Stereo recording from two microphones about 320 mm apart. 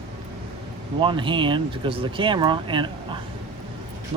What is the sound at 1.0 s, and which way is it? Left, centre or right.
Speech, centre.